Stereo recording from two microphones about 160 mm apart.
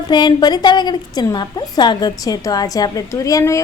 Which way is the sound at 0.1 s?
30° left (ahead or behind).